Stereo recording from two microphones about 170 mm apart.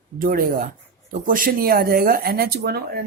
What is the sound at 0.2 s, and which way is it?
A woman's voice, 55° right (ahead or behind).